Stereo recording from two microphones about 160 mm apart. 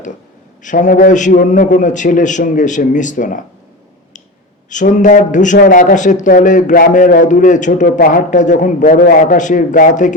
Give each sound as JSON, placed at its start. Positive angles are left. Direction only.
{"t": 0.6, "sound": "a man's voice", "side_deg": 50}
{"t": 4.7, "sound": "a man's voice", "side_deg": 50}